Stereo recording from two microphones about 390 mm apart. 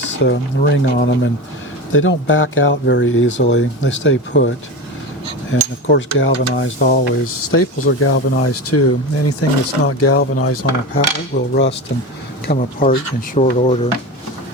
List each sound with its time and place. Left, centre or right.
0.3 s speech: left